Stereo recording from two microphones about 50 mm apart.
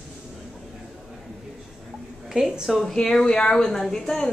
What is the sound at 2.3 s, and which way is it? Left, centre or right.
Speech, centre.